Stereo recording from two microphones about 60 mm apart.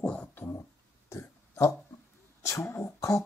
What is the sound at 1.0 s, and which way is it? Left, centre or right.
Burping, left.